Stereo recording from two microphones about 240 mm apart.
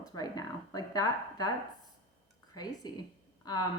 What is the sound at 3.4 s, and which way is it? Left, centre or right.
Speech, centre.